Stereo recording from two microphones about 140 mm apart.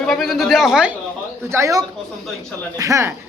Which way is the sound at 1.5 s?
20° right (ahead or behind).